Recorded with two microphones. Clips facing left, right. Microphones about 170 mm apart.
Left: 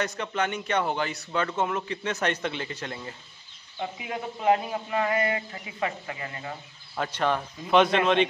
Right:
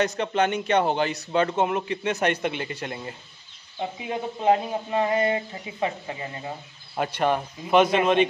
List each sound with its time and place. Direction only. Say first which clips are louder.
0.2 s a man's voice: right 5 dB; 25° right (ahead or behind)
3.8 s a man's voice: right 3 dB; 25° right (ahead or behind); by 8.3 s 10° right (ahead or behind)